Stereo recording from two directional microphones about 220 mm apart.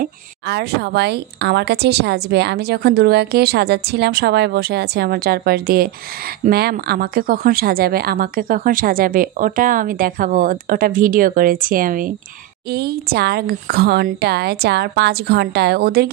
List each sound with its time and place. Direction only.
0.0 s speech: 50° right (ahead or behind)